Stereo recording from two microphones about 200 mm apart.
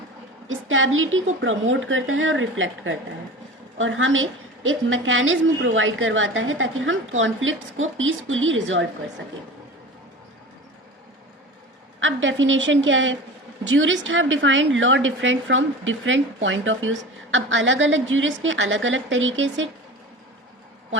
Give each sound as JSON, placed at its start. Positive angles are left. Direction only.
{"t": 0.4, "sound": "a woman's voice", "side_deg": -80}
{"t": 11.9, "sound": "a woman's voice", "side_deg": -70}